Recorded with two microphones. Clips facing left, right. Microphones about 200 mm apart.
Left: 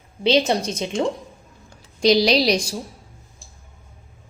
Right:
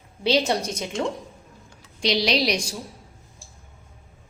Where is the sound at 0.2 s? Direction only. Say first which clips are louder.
Left 3 dB; 20° left (ahead or behind).